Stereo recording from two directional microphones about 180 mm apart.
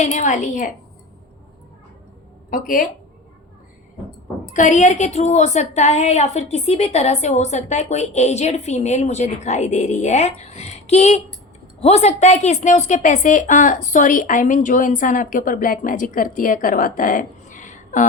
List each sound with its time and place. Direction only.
0.0 s a woman's voice: 40° left (ahead or behind)
2.5 s a woman's voice: 50° left (ahead or behind)
4.5 s a woman's voice: 45° left (ahead or behind)